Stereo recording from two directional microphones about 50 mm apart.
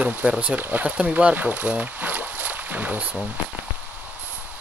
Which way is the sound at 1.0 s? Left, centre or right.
Centre.